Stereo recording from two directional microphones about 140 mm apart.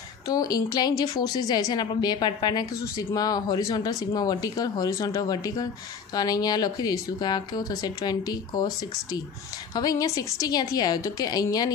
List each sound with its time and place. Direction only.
0.3 s a woman's voice: 25° left (ahead or behind)